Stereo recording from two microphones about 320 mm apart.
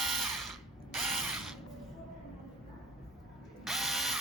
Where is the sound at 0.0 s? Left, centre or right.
Centre.